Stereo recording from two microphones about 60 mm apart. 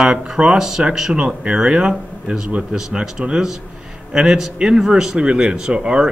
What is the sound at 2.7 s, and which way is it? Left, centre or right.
Speech, centre.